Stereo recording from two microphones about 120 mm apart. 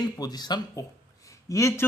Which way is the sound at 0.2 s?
35° left (ahead or behind).